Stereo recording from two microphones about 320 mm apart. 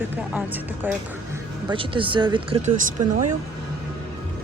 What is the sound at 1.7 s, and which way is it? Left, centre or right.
Speech, centre.